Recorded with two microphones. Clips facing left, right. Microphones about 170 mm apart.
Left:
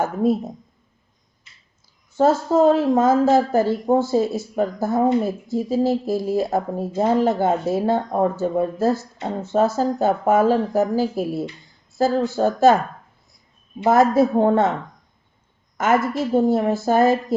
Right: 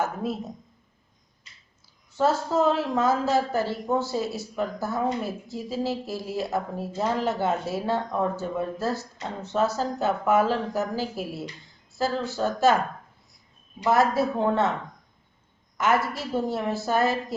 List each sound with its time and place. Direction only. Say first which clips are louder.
0.0 s a woman's voice: left 8 dB; 45° left (ahead or behind)
2.1 s a woman's voice: left 6 dB; 50° left (ahead or behind)
13.8 s a woman's voice: left 6 dB; 50° left (ahead or behind)
15.8 s a woman's voice: left 5 dB; 50° left (ahead or behind)